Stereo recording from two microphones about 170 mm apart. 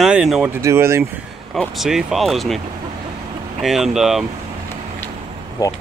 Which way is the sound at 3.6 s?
Centre (ahead or behind).